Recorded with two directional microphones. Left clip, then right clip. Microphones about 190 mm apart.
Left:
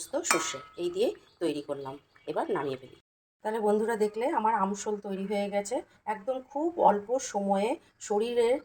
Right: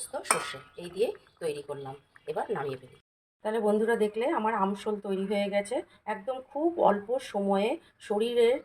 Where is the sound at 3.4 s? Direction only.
Centre (ahead or behind).